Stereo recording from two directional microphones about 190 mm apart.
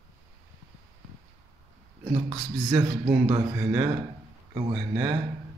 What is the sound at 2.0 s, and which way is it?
Speech, 15° right (ahead or behind).